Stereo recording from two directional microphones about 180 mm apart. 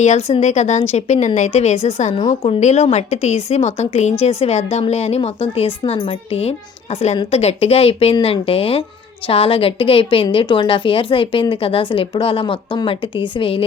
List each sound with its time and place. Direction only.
0.0 s a woman's voice: 40° left (ahead or behind)